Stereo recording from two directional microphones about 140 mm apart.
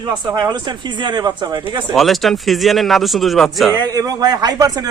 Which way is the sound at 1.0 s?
35° right (ahead or behind).